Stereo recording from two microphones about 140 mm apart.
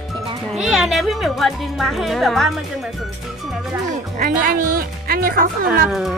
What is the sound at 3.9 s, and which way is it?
Speech, 85° right.